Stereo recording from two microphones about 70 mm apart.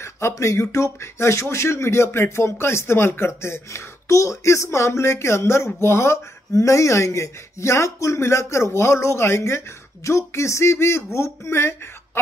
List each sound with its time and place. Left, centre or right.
0.3 s speech: left